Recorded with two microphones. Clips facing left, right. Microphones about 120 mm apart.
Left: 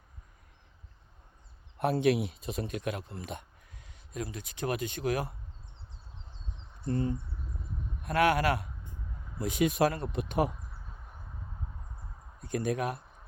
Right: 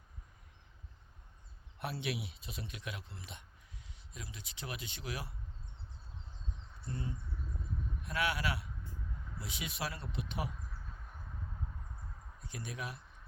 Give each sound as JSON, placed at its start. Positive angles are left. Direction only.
{"t": 1.8, "sound": "speech", "side_deg": 45}
{"t": 6.8, "sound": "speech", "side_deg": 50}
{"t": 8.8, "sound": "a sound", "side_deg": 20}
{"t": 9.4, "sound": "speech", "side_deg": 50}
{"t": 12.4, "sound": "speech", "side_deg": 50}